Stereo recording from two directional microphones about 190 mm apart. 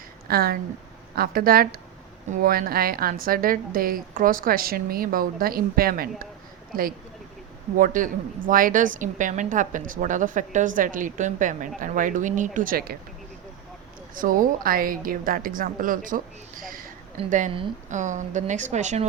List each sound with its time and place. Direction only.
0.3 s a woman's voice: 55° right (ahead or behind)
7.8 s a woman's voice: 45° right (ahead or behind)
14.2 s a woman's voice: 45° right (ahead or behind)
17.2 s a woman's voice: 40° right (ahead or behind)